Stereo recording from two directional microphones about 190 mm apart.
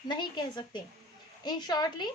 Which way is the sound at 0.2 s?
25° left (ahead or behind).